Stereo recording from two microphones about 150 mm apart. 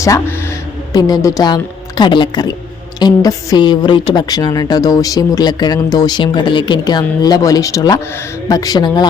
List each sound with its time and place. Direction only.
0.0 s a woman's voice: 20° left (ahead or behind)